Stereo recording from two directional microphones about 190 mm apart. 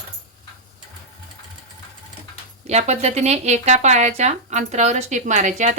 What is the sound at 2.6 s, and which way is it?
Speech, 35° right (ahead or behind).